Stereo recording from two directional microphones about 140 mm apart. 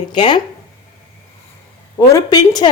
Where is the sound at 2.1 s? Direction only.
30° left (ahead or behind).